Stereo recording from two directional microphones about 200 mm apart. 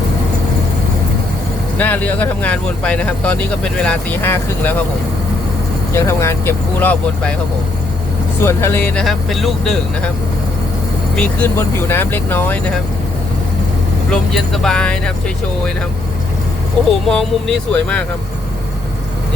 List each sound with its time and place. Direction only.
1.8 s speech: 10° left (ahead or behind)
5.9 s speech: 15° left (ahead or behind)
8.4 s speech: 10° left (ahead or behind)
11.2 s speech: 10° left (ahead or behind)
14.1 s speech: centre (ahead or behind)
17.1 s speech: 5° left (ahead or behind)